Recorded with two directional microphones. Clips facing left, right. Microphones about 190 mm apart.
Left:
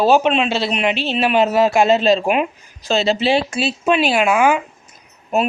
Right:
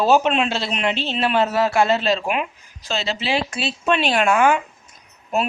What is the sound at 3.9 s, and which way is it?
Speech, 5° left (ahead or behind).